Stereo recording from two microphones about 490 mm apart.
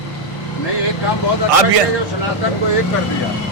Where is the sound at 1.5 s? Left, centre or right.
Right.